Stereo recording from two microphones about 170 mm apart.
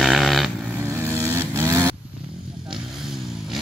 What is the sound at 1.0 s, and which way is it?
Vehicle, 15° right (ahead or behind).